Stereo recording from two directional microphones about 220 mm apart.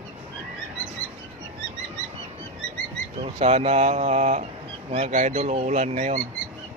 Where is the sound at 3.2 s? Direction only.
30° right (ahead or behind).